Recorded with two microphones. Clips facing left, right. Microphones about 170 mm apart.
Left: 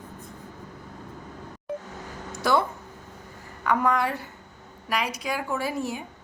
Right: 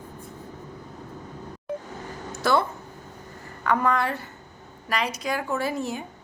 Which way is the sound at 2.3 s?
15° left (ahead or behind).